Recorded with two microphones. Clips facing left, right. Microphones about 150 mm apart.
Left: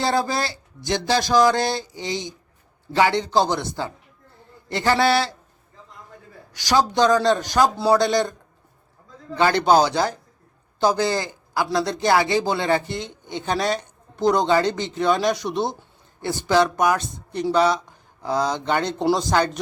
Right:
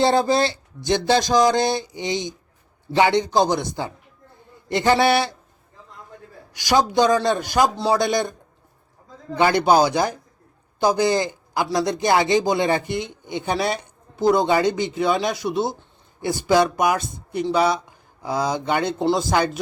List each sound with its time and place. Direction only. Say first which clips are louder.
0.0 s a sound: right 5 dB; 25° right (ahead or behind)
2.9 s a man's voice: right 1 dB; 20° right (ahead or behind)
6.6 s a man's voice: right 1 dB; 10° right (ahead or behind)